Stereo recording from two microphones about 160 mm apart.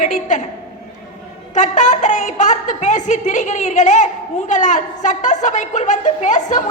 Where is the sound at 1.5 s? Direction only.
50° left (ahead or behind).